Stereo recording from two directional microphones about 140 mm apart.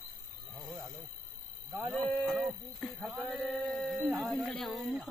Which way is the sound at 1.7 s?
15° right (ahead or behind).